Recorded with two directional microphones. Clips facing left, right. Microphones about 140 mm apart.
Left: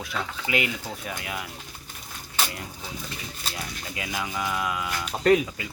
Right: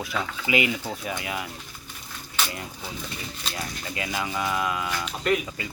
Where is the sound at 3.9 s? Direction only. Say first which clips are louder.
Right 2 dB; centre (ahead or behind).